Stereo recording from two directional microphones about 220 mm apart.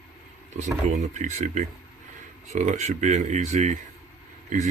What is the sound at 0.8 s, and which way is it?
Speech, 35° right (ahead or behind).